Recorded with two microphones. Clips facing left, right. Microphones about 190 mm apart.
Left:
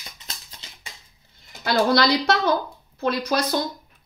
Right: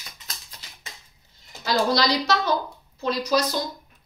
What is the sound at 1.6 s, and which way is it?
A woman's voice, 60° left (ahead or behind).